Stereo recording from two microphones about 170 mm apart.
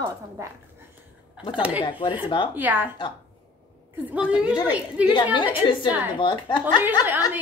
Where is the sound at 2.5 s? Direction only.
10° right (ahead or behind).